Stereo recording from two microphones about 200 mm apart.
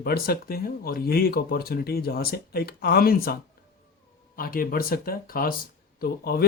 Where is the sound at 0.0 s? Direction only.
50° left (ahead or behind).